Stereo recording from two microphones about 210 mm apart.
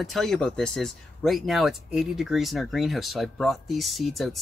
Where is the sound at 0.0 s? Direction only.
Centre (ahead or behind).